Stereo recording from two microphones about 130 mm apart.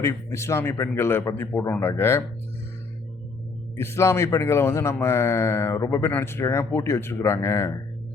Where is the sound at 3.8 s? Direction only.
20° left (ahead or behind).